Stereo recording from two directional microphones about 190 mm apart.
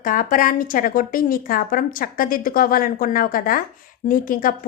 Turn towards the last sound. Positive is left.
turn(degrees=45)  # may be behind; listen again after turning